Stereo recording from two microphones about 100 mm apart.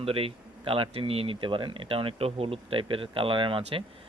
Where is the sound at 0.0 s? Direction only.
70° right (ahead or behind).